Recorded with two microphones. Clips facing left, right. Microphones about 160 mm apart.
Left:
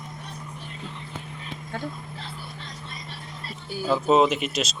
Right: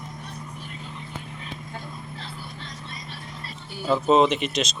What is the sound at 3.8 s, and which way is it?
Speech, 5° left (ahead or behind).